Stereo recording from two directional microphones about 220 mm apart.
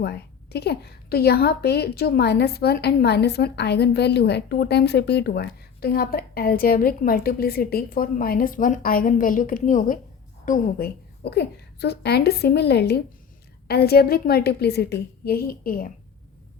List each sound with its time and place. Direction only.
0.0 s a woman's voice: 50° left (ahead or behind)